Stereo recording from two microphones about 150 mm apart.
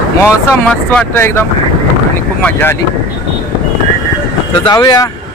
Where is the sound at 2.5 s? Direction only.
15° left (ahead or behind).